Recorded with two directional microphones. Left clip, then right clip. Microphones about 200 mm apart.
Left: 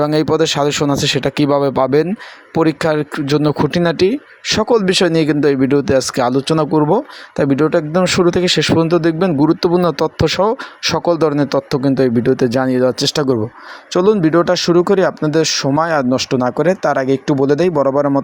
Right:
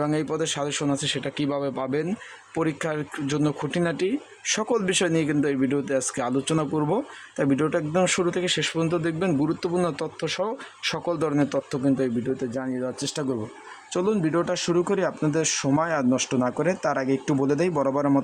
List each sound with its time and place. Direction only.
0.0 s a man's voice: 30° left (ahead or behind)